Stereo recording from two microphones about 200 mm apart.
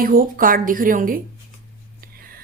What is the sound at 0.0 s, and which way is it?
Speech, 45° right (ahead or behind).